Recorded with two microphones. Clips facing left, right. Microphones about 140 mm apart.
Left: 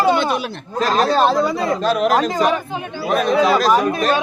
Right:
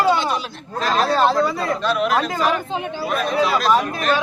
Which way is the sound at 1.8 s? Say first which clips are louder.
Left 3 dB; 40° left (ahead or behind).